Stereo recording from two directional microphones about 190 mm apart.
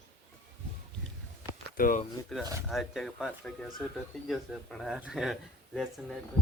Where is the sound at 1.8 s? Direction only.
50° left (ahead or behind).